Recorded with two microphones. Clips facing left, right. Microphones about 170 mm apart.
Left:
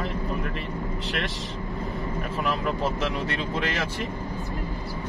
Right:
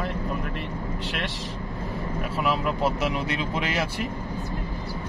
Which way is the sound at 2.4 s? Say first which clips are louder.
Right 2 dB; 10° right (ahead or behind).